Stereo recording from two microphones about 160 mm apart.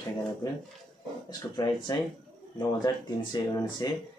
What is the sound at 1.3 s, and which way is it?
Speech, 25° left (ahead or behind).